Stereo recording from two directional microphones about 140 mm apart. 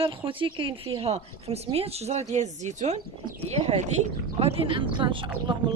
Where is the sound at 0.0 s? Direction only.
40° right (ahead or behind).